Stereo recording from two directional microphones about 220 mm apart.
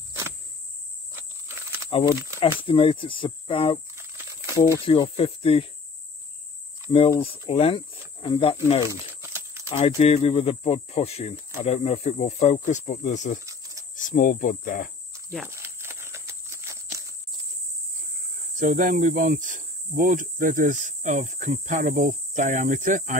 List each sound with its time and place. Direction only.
1.1 s walk: 10° right (ahead or behind)
1.9 s speech: 25° left (ahead or behind)
3.9 s crumpling: 10° right (ahead or behind)
4.6 s speech: 15° left (ahead or behind)
7.1 s speech: 25° left (ahead or behind)
9.2 s a sound: 10° right (ahead or behind)
9.7 s speech: 25° left (ahead or behind)
13.5 s cricket: 15° right (ahead or behind)
13.9 s speech: 35° left (ahead or behind)
15.3 s a sound: 10° right (ahead or behind)
18.6 s speech: 35° right (ahead or behind)